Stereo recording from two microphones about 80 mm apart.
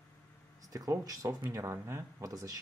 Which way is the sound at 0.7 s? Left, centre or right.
Right.